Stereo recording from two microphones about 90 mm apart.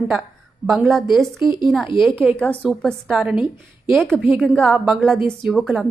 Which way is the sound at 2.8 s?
5° right (ahead or behind).